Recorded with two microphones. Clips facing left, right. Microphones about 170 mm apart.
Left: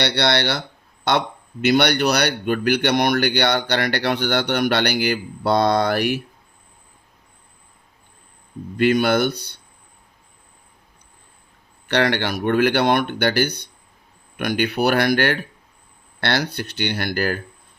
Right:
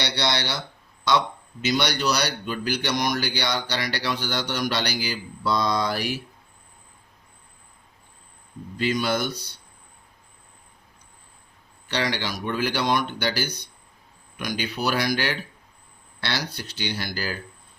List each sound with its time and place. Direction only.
0.0 s a man's voice: 60° left (ahead or behind)
8.8 s speech: 60° left (ahead or behind)
11.9 s speech: 60° left (ahead or behind)